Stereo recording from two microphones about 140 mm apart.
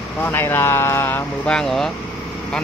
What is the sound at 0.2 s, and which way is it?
Speech, 15° left (ahead or behind).